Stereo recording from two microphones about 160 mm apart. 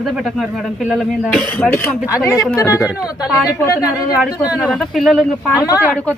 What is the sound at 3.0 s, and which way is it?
Speech, 20° left (ahead or behind).